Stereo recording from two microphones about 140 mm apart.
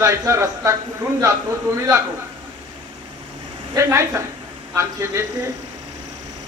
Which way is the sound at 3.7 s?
20° right (ahead or behind).